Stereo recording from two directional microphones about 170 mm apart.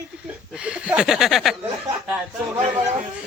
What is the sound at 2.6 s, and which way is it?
Speech, 40° right (ahead or behind).